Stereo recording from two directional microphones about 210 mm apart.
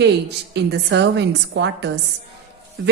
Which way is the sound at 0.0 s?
55° right (ahead or behind).